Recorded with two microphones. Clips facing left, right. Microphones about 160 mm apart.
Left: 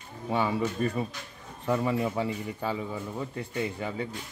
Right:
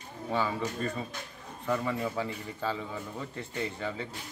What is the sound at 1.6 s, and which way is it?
Speech, 20° left (ahead or behind).